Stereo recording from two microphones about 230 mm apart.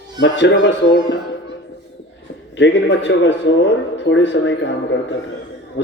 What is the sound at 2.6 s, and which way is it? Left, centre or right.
Speech, left.